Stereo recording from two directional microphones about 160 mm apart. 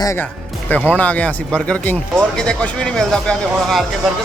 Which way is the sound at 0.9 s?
10° left (ahead or behind).